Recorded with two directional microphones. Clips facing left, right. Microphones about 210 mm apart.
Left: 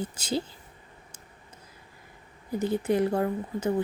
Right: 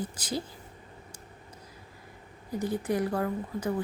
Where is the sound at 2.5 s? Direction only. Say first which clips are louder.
Left 4 dB; 25° left (ahead or behind).